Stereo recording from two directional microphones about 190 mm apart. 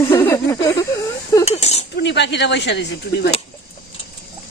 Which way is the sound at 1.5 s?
35° left (ahead or behind).